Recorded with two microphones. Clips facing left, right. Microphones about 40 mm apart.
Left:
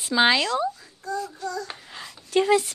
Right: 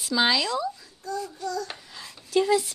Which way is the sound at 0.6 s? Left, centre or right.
Left.